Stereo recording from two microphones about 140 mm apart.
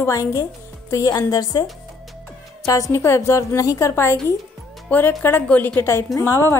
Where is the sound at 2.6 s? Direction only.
25° left (ahead or behind).